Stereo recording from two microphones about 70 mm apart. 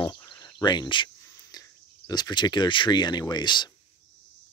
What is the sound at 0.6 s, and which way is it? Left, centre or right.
Speech, left.